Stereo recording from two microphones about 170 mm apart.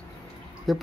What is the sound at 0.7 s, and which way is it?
Speech, centre (ahead or behind).